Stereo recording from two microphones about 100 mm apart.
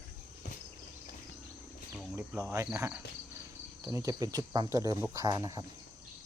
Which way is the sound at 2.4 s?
30° right (ahead or behind).